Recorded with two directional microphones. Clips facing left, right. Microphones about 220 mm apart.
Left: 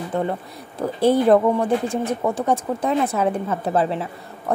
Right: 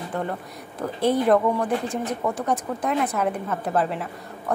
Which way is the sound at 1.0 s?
30° left (ahead or behind).